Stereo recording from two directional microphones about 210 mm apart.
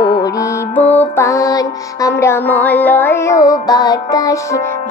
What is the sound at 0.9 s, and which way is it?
Music, 10° left (ahead or behind).